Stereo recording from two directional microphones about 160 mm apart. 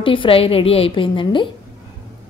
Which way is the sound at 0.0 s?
30° left (ahead or behind).